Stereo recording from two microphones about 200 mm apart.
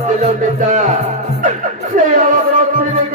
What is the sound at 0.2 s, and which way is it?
Speech, 40° right (ahead or behind).